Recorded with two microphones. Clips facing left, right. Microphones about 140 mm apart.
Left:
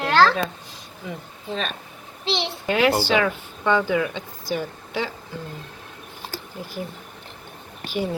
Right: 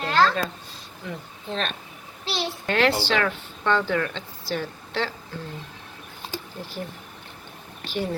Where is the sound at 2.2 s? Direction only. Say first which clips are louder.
Left 3 dB; 25° left (ahead or behind).